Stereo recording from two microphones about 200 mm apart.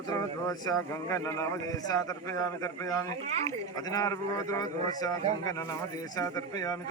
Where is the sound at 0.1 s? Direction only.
20° left (ahead or behind).